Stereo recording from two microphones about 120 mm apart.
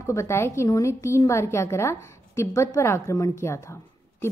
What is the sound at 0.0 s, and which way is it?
A woman's voice, 25° left (ahead or behind).